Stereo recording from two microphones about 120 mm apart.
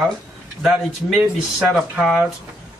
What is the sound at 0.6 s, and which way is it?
Speech, 5° right (ahead or behind).